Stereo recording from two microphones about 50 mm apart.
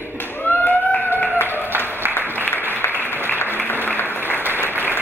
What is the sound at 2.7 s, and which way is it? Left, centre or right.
Applause, left.